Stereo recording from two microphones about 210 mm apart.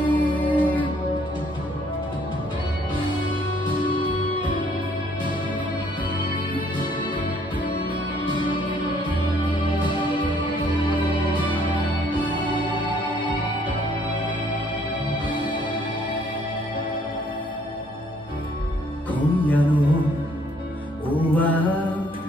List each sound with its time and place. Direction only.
0.0 s music: 5° left (ahead or behind)
9.4 s music: 20° left (ahead or behind)
11.1 s music: 20° right (ahead or behind)
12.5 s music: 20° left (ahead or behind)
19.1 s music: 5° left (ahead or behind)
19.7 s music: 5° right (ahead or behind)
21.4 s music: 5° left (ahead or behind)